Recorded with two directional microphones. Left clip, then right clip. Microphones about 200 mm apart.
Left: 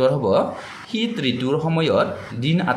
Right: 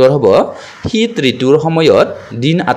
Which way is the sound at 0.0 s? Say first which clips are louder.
Right 10 dB; 35° right (ahead or behind).